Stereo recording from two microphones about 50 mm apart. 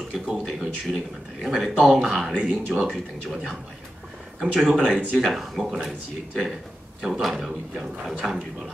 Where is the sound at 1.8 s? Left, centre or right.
Centre.